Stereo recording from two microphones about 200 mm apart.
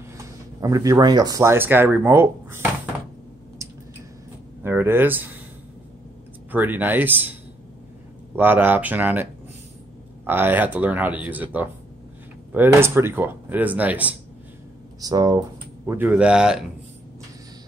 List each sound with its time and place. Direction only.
0.2 s speech: 15° right (ahead or behind)
4.6 s speech: 10° right (ahead or behind)
6.5 s speech: 10° right (ahead or behind)
8.4 s speech: 10° right (ahead or behind)
12.5 s speech: 10° right (ahead or behind)
15.0 s speech: 20° right (ahead or behind)
15.9 s speech: 10° right (ahead or behind)